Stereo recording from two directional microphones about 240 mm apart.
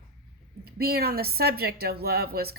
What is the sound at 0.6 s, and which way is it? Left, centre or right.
Speech, right.